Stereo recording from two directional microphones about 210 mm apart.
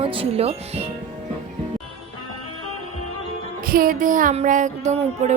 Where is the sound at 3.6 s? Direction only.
45° right (ahead or behind).